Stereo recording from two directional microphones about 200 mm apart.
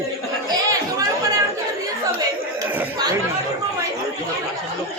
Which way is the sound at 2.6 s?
10° right (ahead or behind).